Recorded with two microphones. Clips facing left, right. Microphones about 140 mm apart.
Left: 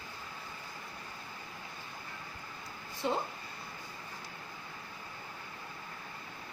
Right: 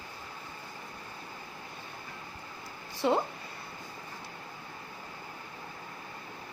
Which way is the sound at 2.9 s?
80° right.